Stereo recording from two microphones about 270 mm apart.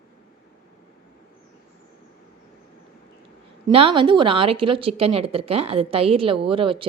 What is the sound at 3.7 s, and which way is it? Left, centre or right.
Speech, centre.